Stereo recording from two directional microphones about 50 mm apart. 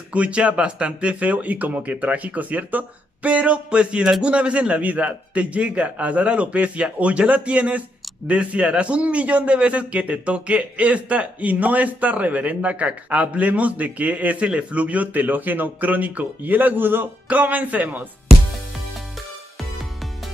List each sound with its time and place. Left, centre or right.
0.1 s a man's voice: right
17.3 s speech: right